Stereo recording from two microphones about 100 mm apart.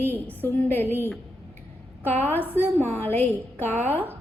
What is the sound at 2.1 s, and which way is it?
Speech, 20° left (ahead or behind).